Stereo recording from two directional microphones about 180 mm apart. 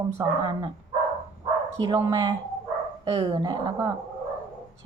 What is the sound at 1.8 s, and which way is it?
Speech, 25° right (ahead or behind).